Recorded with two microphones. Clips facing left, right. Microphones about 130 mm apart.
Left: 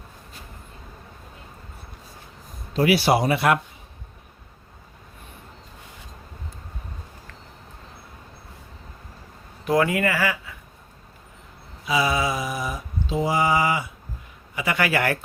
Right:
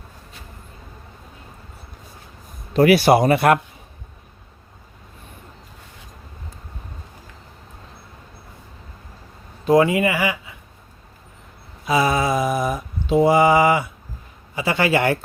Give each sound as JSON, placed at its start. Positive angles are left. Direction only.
{"t": 2.7, "sound": "mantra", "side_deg": -55}
{"t": 9.6, "sound": "speech", "side_deg": -25}
{"t": 11.9, "sound": "mantra", "side_deg": -45}
{"t": 14.5, "sound": "a man's voice", "side_deg": -30}